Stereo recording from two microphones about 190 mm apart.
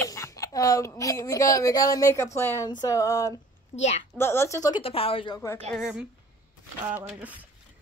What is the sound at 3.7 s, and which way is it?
Speech, 35° left (ahead or behind).